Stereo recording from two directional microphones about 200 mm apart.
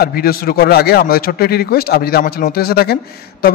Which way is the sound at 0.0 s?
50° left (ahead or behind).